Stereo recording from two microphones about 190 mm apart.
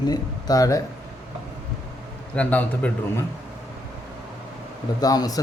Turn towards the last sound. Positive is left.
turn(degrees=20)  # may be behind; listen again after turning